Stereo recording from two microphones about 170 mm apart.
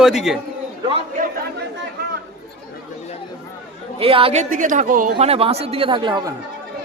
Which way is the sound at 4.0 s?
35° right (ahead or behind).